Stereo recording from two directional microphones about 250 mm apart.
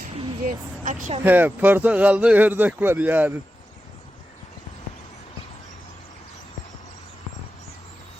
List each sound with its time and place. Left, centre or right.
0.2 s vehicle: right
1.2 s speech: centre